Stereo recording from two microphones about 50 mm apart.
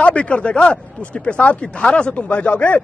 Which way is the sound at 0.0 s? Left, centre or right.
Left.